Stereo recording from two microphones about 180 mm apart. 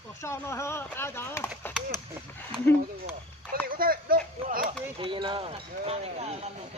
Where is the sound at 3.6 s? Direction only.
55° right (ahead or behind).